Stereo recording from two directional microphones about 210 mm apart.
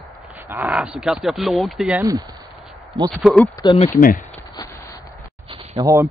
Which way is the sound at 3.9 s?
35° left (ahead or behind).